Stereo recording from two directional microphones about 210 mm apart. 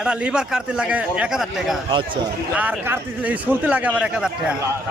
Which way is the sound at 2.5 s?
5° right (ahead or behind).